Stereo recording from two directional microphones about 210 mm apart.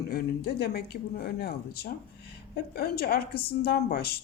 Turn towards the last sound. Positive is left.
turn(degrees=50)  # may be behind; listen again after turning